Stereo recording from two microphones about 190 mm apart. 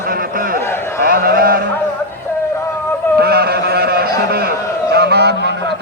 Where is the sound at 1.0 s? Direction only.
50° right (ahead or behind).